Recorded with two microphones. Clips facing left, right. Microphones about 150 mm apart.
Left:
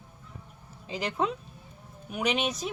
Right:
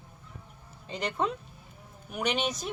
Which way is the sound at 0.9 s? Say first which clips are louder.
Left 1 dB; centre (ahead or behind).